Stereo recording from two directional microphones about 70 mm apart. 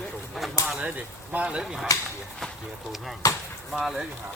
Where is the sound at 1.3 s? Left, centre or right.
Centre.